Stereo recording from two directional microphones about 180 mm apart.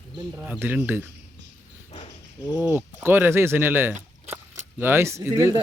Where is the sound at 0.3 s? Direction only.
10° right (ahead or behind).